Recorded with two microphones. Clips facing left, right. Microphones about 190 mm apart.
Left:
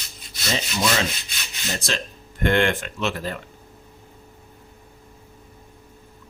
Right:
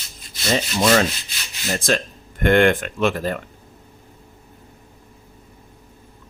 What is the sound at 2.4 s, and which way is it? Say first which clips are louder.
Speech: right 5 dB; 55° right (ahead or behind).